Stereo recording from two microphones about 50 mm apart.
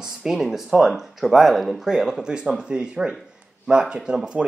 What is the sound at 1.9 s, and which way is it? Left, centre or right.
Speech, centre.